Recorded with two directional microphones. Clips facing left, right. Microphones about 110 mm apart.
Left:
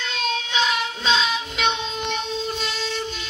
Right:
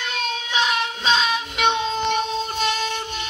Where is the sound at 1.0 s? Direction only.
45° right (ahead or behind).